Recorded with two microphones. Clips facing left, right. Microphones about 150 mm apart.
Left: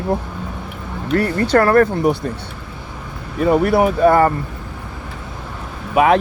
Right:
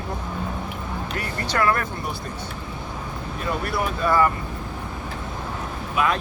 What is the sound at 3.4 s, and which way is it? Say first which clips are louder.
Speech: left 13 dB; 65° left (ahead or behind).